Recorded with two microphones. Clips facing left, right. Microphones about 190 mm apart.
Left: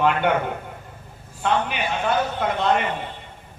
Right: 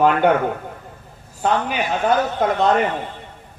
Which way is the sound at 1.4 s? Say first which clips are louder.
Right 3 dB; 40° right (ahead or behind).